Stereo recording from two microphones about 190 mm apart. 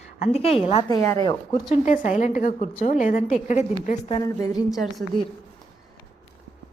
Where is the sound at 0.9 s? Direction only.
15° left (ahead or behind).